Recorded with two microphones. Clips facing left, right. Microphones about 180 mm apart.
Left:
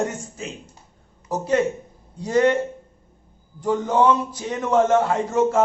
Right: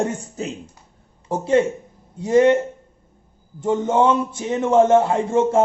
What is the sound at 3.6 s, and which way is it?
A man's voice, 25° right (ahead or behind).